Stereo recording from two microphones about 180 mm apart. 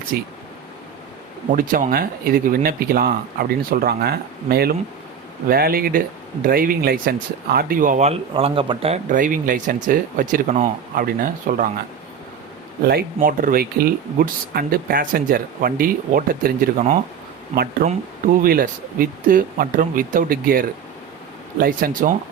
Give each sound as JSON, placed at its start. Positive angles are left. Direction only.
{"t": 0.1, "sound": "speech", "side_deg": -60}
{"t": 1.5, "sound": "speech", "side_deg": -45}
{"t": 12.8, "sound": "speech", "side_deg": -60}
{"t": 17.5, "sound": "speech", "side_deg": -55}